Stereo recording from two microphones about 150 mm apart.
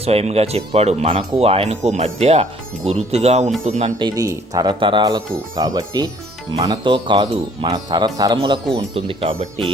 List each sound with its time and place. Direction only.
0.0 s speech: 40° right (ahead or behind)
3.9 s speech: 25° right (ahead or behind)
8.7 s speech: 40° right (ahead or behind)